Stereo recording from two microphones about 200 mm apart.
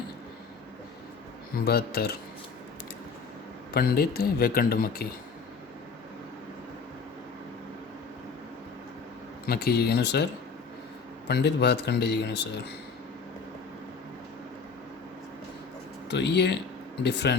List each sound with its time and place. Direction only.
1.6 s speech: 50° left (ahead or behind)
3.8 s speech: 50° left (ahead or behind)
9.5 s speech: 50° left (ahead or behind)
11.3 s speech: 55° left (ahead or behind)
16.0 s speech: 60° left (ahead or behind)